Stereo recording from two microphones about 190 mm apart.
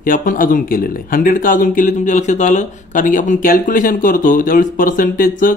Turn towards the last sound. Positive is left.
turn(degrees=45)  # may be behind; listen again after turning